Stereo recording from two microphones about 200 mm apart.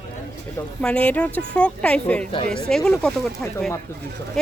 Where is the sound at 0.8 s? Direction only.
5° left (ahead or behind).